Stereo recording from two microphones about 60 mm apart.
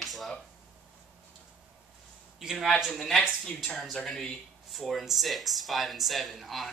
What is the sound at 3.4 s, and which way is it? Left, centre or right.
Speech, centre.